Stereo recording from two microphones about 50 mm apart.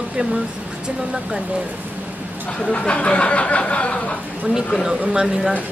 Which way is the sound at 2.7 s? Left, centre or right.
Left.